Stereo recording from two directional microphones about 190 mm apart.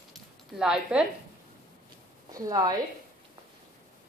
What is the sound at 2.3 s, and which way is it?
Speech, 20° right (ahead or behind).